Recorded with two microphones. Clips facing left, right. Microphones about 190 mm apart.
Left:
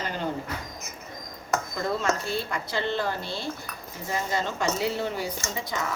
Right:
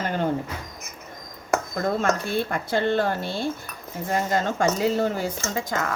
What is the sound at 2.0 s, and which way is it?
Speech, 55° right (ahead or behind).